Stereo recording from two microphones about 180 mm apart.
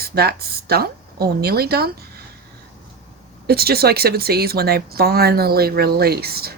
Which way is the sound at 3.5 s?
60° right (ahead or behind).